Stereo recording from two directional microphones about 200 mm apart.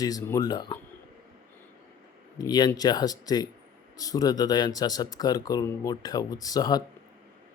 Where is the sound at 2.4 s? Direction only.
20° left (ahead or behind).